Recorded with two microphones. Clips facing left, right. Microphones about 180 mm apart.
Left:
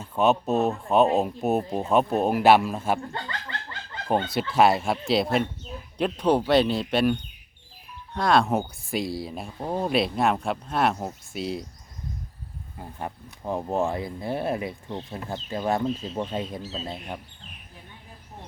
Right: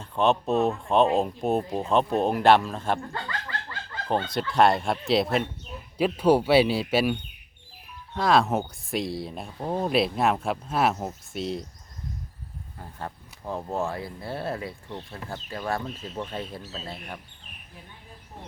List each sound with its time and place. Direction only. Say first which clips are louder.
0.0 s speech: left 1 dB; 5° left (ahead or behind)
3.1 s speech: right 1 dB; 25° left (ahead or behind)
4.1 s speech: left 2 dB; 10° left (ahead or behind)
12.7 s speech: left 3 dB; 15° left (ahead or behind)